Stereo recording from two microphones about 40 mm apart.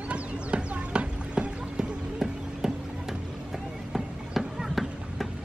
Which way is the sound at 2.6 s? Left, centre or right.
Centre.